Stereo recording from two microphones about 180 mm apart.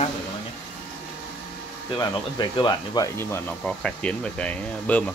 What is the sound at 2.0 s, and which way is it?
Speech, 25° left (ahead or behind).